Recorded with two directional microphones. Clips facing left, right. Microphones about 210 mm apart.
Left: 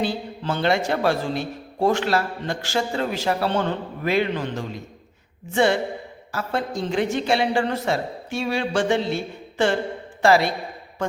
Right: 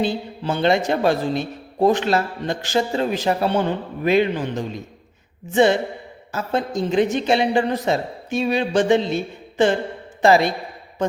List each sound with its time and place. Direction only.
0.0 s a woman's voice: 20° right (ahead or behind)